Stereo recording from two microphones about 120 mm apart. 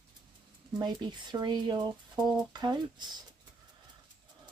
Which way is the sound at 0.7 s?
40° right (ahead or behind).